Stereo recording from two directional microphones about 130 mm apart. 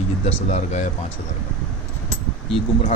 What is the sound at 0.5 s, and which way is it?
Speech, 60° left (ahead or behind).